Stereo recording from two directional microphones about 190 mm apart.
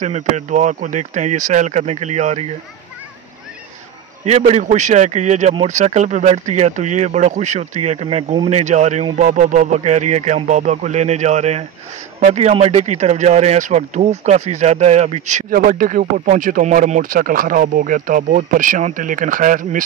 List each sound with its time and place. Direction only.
0.0 s speech: 40° right (ahead or behind)
4.2 s speech: 35° right (ahead or behind)